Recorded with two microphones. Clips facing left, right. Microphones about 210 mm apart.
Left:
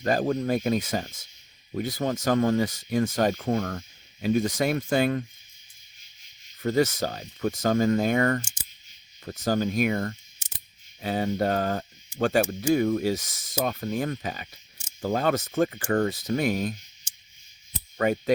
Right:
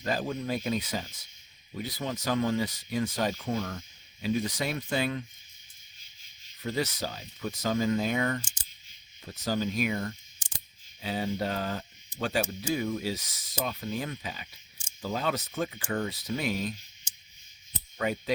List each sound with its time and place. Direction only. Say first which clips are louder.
0.0 s speech: left 7 dB; 50° left (ahead or behind)
6.6 s speech: left 8 dB; 50° left (ahead or behind)
17.9 s speech: left 6 dB; 50° left (ahead or behind)